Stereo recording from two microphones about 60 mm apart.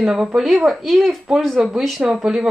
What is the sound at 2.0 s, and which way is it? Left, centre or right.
Speech, centre.